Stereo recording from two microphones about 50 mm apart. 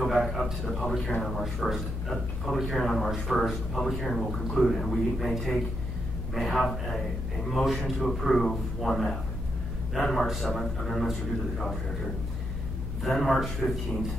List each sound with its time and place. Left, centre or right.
0.0 s speech: centre
13.0 s speech: centre
13.6 s a man's voice: left